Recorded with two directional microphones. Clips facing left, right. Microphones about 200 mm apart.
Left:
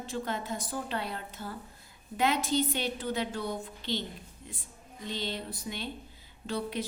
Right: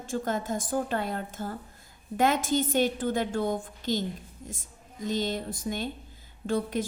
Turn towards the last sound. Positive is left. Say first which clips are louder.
# right 5 dB
turn(degrees=-50)  # may be behind; listen again after turning